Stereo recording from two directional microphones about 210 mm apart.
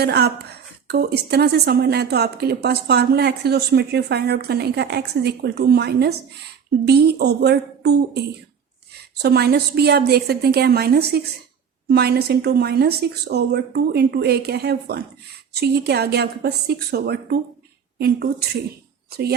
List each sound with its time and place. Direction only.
0.0 s a woman's voice: 50° right (ahead or behind)
9.2 s a woman's voice: 50° right (ahead or behind)